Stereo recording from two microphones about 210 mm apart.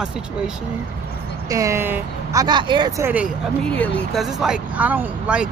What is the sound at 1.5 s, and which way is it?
Speech, 15° right (ahead or behind).